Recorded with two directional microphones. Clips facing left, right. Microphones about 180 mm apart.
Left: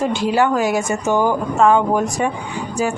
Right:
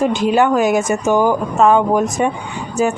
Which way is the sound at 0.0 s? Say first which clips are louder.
Right 3 dB; 20° right (ahead or behind).